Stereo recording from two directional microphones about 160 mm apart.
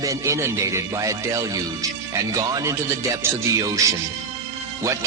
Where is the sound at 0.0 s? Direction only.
20° right (ahead or behind).